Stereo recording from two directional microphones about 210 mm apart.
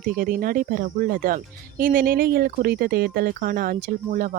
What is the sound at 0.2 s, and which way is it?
Speech, 40° right (ahead or behind).